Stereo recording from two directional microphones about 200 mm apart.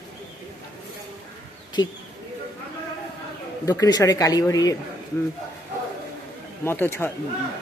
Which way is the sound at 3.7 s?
20° left (ahead or behind).